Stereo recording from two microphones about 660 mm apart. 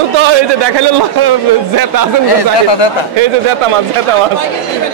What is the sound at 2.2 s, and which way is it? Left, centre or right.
Speech, left.